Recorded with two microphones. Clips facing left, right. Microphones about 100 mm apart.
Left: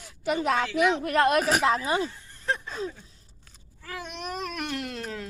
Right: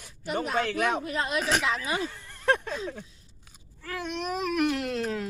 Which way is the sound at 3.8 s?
Centre (ahead or behind).